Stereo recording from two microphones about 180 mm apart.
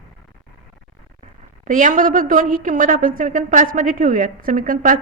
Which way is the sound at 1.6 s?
45° right (ahead or behind).